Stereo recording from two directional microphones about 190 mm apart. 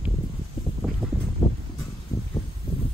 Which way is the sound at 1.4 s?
30° left (ahead or behind).